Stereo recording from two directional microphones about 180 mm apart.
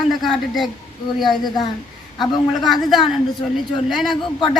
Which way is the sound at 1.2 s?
25° left (ahead or behind).